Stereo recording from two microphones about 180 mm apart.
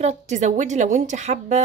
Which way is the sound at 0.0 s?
40° right (ahead or behind).